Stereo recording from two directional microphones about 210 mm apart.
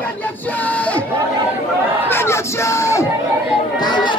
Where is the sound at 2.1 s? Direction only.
10° left (ahead or behind).